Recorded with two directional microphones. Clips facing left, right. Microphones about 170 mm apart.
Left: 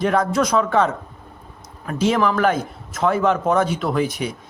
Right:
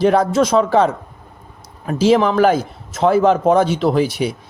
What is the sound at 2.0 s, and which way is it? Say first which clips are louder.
Speech: right 5 dB; 30° right (ahead or behind).